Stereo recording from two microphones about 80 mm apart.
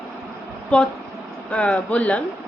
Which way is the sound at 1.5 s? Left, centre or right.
Centre.